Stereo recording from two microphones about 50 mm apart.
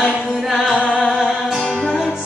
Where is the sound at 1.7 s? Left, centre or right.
Centre.